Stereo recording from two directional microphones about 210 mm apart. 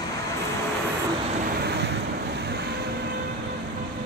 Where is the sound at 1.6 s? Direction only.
50° right (ahead or behind).